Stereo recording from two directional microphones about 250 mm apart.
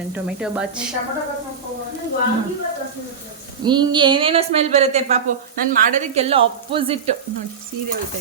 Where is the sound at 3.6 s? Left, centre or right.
Centre.